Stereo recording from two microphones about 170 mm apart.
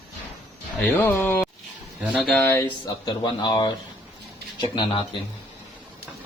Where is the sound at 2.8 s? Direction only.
25° left (ahead or behind).